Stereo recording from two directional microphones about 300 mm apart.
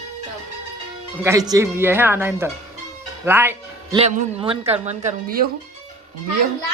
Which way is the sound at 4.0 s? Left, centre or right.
Right.